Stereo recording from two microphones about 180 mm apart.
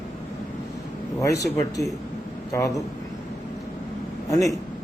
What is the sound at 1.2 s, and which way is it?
Speech, 15° left (ahead or behind).